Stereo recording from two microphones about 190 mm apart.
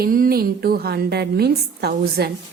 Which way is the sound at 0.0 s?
50° right (ahead or behind).